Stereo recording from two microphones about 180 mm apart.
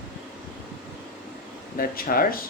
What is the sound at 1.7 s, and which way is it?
Speech, 55° left (ahead or behind).